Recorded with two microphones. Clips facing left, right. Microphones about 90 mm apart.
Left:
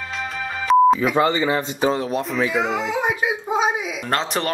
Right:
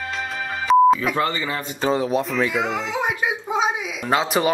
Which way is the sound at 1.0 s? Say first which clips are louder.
Left 4 dB; 20° left (ahead or behind).